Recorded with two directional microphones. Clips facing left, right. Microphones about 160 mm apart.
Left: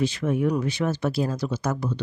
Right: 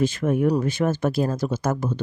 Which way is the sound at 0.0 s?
50° right (ahead or behind).